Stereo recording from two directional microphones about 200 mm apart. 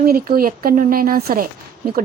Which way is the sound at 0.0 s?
50° right (ahead or behind).